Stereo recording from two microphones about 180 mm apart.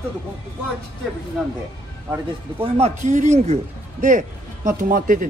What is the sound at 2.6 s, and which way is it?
Speech, 35° right (ahead or behind).